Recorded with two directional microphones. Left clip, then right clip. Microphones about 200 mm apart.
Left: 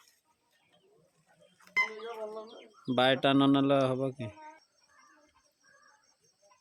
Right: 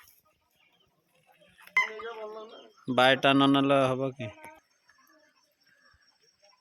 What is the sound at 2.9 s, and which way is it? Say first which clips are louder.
Speech: right 4 dB; centre (ahead or behind).